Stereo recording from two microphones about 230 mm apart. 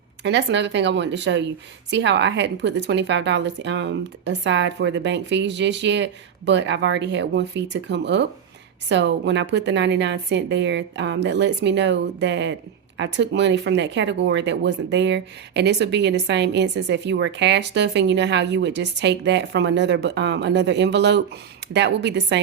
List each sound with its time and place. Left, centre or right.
0.2 s speech: right